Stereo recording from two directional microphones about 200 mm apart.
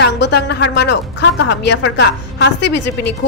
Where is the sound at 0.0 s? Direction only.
60° left (ahead or behind).